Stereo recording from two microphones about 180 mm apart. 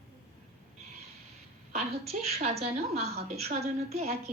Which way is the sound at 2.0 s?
35° right (ahead or behind).